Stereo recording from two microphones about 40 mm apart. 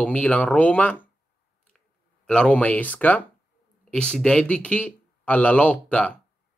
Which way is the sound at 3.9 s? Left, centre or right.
Left.